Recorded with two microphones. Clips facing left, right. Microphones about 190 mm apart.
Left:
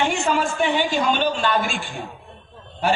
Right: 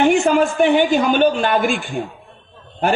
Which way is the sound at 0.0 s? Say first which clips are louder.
Right 7 dB; 55° right (ahead or behind).